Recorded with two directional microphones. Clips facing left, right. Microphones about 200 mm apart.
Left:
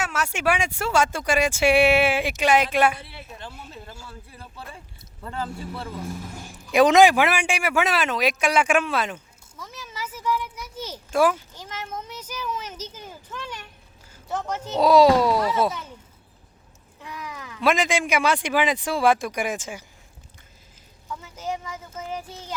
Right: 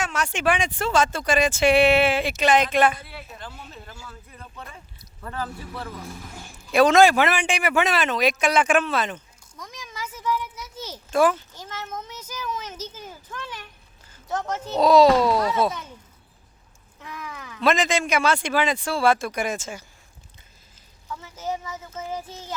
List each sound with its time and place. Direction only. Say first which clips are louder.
0.0 s a man's voice: right 1 dB; 5° left (ahead or behind)
3.0 s speech: even; 25° left (ahead or behind)
6.7 s a man's voice: left 1 dB; 15° left (ahead or behind)
14.1 s a sound: right 1 dB; 10° left (ahead or behind)
14.7 s a man's voice: even; 10° left (ahead or behind)
17.0 s a sound: even; 10° left (ahead or behind)
17.6 s a man's voice: even; 10° left (ahead or behind)
21.9 s child singing: right 1 dB; 10° right (ahead or behind)